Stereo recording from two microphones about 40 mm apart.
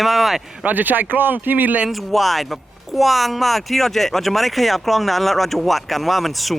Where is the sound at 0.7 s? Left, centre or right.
Right.